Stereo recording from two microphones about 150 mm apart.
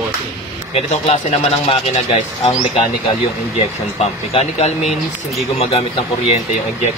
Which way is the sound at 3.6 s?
40° left (ahead or behind).